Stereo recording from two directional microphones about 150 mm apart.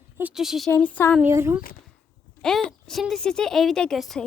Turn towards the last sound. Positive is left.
turn(degrees=0)  # may be behind; listen again after turning